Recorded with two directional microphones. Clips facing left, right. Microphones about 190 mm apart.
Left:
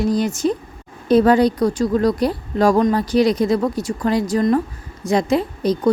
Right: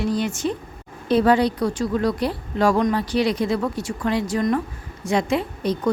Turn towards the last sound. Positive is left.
turn(degrees=40)  # may be behind; listen again after turning